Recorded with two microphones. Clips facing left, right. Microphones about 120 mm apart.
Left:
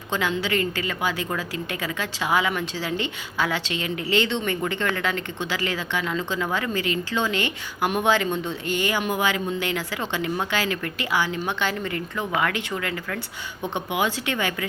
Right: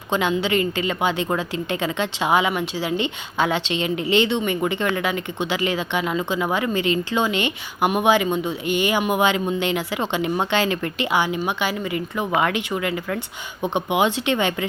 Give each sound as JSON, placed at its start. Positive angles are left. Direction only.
{"t": 0.1, "sound": "a woman's voice", "side_deg": -20}